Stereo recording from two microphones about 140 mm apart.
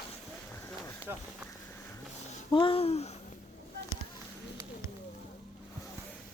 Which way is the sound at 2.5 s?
40° left (ahead or behind).